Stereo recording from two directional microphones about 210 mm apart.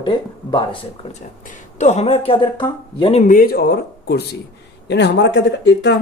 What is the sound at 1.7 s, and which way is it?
Speech, 30° left (ahead or behind).